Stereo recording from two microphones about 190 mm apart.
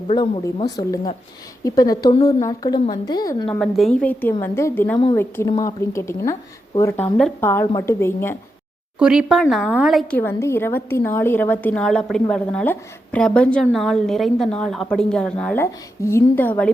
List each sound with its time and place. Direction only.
0.4 s speech: 20° left (ahead or behind)
3.4 s a woman's voice: 5° left (ahead or behind)
9.0 s speech: 5° right (ahead or behind)
10.2 s a woman's voice: 10° left (ahead or behind)